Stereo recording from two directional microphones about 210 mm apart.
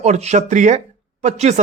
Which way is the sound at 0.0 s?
35° right (ahead or behind).